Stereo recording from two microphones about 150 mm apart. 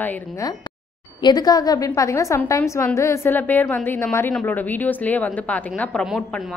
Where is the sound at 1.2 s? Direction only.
25° left (ahead or behind).